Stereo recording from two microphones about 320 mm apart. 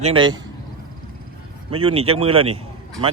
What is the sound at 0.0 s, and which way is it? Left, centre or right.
Speech, centre.